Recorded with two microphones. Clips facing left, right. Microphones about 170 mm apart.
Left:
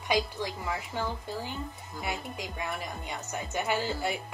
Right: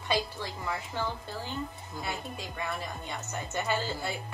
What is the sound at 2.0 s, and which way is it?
Speech, 15° left (ahead or behind).